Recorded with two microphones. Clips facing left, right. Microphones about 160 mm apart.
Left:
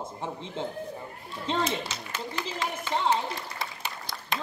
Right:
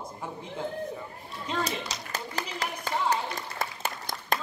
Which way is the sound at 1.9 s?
40° right (ahead or behind).